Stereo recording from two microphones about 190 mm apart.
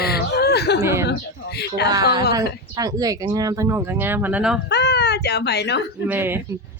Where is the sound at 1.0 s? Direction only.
60° left (ahead or behind).